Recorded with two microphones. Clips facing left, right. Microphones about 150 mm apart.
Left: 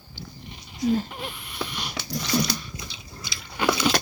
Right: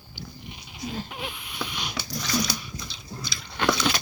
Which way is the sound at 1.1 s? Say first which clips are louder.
Even; centre (ahead or behind).